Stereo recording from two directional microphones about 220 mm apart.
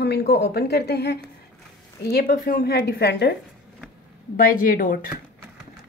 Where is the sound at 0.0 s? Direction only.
45° left (ahead or behind).